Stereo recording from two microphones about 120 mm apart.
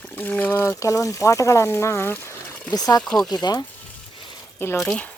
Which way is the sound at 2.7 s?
35° left (ahead or behind).